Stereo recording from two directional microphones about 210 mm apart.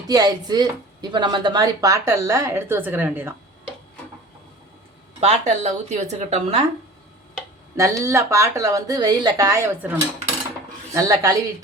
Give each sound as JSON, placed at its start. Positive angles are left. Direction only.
{"t": 0.1, "sound": "speech", "side_deg": -20}
{"t": 5.2, "sound": "speech", "side_deg": -30}
{"t": 7.8, "sound": "speech", "side_deg": -15}